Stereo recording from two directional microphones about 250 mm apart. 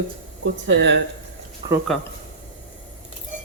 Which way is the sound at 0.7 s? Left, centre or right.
Right.